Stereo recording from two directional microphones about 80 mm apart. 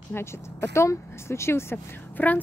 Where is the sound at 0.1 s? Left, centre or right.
Left.